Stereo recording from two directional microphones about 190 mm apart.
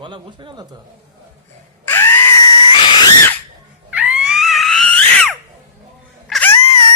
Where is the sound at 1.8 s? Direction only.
10° left (ahead or behind).